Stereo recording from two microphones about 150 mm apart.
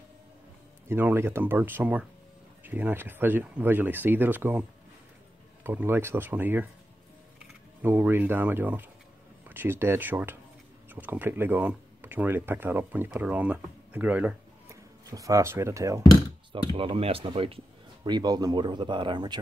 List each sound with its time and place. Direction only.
0.8 s speech: 15° right (ahead or behind)
7.8 s speech: 15° right (ahead or behind)
15.0 s speech: 20° right (ahead or behind)
16.7 s speech: 35° right (ahead or behind)